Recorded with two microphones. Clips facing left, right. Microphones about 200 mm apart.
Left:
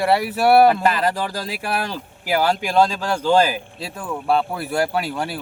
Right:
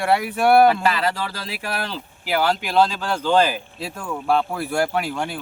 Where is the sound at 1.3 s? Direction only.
45° left (ahead or behind).